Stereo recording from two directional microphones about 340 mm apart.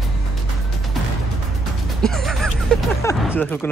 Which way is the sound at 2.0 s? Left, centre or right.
Centre.